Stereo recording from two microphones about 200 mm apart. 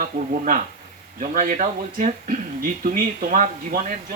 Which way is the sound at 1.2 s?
40° right (ahead or behind).